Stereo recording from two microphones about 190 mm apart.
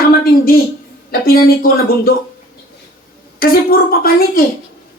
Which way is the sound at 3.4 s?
50° left (ahead or behind).